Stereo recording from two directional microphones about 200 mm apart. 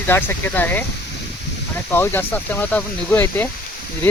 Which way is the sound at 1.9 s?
10° left (ahead or behind).